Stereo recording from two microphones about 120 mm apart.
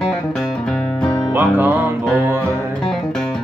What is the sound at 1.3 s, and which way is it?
Music, 20° right (ahead or behind).